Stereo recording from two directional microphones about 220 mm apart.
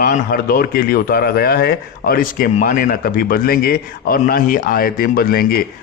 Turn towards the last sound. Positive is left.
turn(degrees=40)  # may be behind; listen again after turning